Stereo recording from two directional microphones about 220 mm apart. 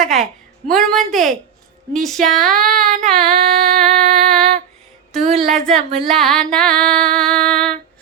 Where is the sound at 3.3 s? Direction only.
40° right (ahead or behind).